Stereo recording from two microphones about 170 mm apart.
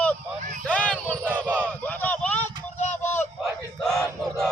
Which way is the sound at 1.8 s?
10° left (ahead or behind).